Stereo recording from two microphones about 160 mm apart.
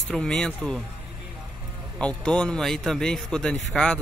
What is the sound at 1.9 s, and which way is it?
Speech, 5° left (ahead or behind).